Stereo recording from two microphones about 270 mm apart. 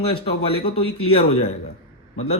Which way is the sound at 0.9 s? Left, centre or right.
Left.